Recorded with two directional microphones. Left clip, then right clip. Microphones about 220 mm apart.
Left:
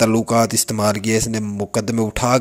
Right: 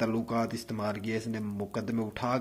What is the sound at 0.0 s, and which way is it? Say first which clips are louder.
Speech: left 15 dB; 45° left (ahead or behind).